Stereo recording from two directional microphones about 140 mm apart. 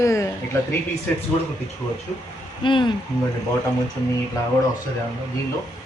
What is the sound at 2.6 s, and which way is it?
Speech, 35° left (ahead or behind).